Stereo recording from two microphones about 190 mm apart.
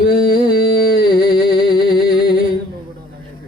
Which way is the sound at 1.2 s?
50° left (ahead or behind).